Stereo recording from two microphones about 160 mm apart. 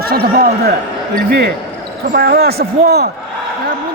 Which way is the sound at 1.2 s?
85° right.